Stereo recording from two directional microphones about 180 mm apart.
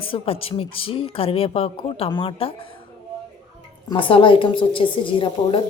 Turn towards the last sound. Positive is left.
turn(degrees=30)  # may be behind; listen again after turning